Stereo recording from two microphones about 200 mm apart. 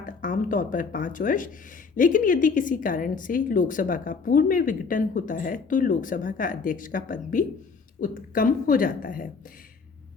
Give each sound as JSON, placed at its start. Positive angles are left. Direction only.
{"t": 0.0, "sound": "a woman's voice", "side_deg": 45}